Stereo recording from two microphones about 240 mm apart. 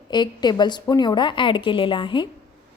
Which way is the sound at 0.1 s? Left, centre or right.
Centre.